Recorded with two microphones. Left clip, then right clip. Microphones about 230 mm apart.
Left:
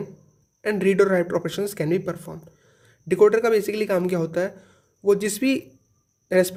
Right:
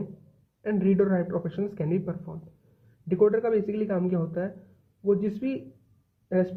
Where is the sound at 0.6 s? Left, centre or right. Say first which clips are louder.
Left 6 dB; left.